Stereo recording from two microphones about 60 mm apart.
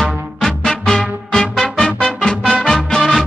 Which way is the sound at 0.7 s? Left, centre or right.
Centre.